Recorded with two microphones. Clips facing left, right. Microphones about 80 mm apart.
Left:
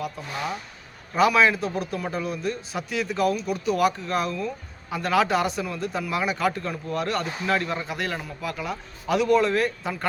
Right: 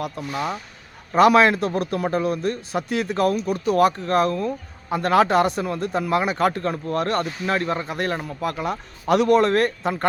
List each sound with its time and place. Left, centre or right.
1.1 s a man's voice: right